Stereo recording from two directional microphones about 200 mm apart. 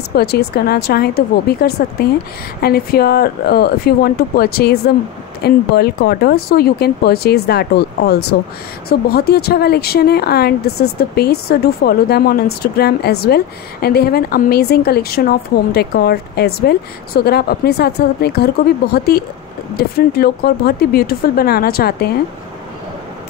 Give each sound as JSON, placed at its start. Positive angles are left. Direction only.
{"t": 0.1, "sound": "a woman's voice", "side_deg": 50}